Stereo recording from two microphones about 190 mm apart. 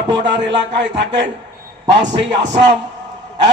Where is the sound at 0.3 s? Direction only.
70° right (ahead or behind).